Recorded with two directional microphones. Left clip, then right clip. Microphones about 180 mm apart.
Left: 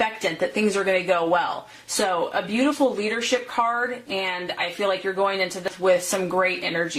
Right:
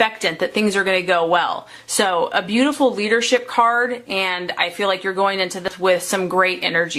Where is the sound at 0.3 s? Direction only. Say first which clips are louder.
Right 4 dB; 30° right (ahead or behind).